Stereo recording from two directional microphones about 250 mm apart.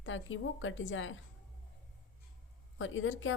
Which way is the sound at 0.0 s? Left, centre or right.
Left.